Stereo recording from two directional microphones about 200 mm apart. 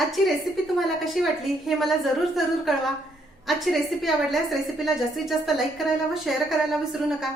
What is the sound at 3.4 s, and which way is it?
Speech, centre (ahead or behind).